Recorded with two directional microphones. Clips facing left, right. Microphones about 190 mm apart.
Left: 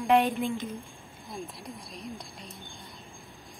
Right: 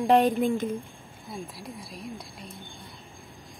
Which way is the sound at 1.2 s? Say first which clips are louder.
Right 1 dB; centre (ahead or behind).